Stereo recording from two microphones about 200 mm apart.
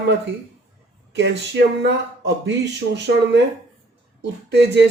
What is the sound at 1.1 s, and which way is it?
Speech, 60° right (ahead or behind).